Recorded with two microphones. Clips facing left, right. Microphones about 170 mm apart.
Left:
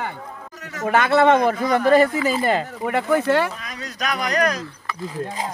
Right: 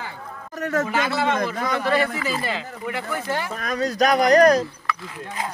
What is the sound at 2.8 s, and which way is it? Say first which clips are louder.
Speech: left 9 dB; 60° left (ahead or behind).